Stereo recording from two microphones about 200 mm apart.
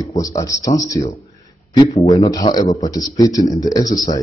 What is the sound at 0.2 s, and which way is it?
Speech, 15° left (ahead or behind).